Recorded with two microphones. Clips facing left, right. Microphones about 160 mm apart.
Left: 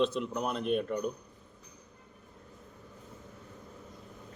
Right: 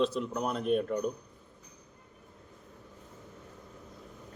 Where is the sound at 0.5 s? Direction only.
40° right (ahead or behind).